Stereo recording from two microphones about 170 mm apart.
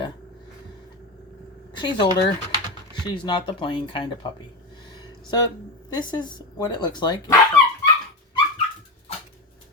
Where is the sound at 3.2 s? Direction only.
25° left (ahead or behind).